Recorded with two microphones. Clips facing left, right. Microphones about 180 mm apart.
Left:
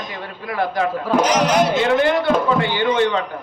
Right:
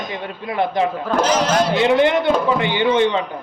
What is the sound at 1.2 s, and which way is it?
Speech, 15° left (ahead or behind).